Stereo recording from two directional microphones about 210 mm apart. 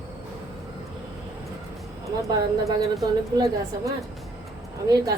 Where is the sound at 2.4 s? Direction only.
15° right (ahead or behind).